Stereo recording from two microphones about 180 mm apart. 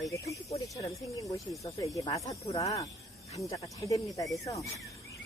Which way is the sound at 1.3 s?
20° left (ahead or behind).